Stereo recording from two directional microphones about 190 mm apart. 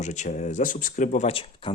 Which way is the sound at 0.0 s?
40° left (ahead or behind).